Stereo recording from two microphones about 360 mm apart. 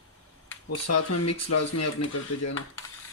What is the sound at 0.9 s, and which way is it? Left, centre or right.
Speech, left.